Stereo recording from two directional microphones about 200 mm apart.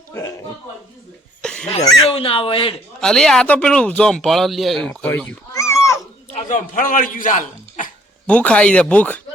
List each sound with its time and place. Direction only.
1.4 s a sound: 5° left (ahead or behind)
2.0 s speech: 30° left (ahead or behind)
3.0 s speech: 5° left (ahead or behind)
6.3 s speech: 40° left (ahead or behind)
8.3 s speech: 5° left (ahead or behind)